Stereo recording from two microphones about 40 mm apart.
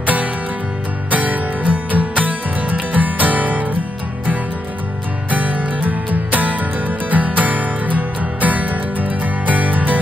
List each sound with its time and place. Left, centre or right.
0.0 s music: right
5.3 s music: right